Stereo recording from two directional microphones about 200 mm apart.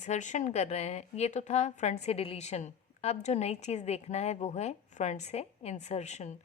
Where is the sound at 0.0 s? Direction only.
35° left (ahead or behind).